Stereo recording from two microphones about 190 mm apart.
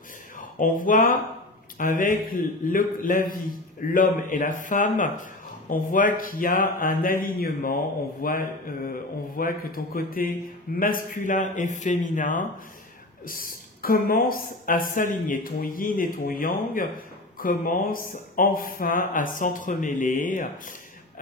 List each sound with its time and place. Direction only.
0.6 s a woman's voice: 45° left (ahead or behind)